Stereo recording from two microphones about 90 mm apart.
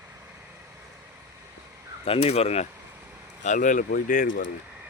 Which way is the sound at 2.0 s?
90° left.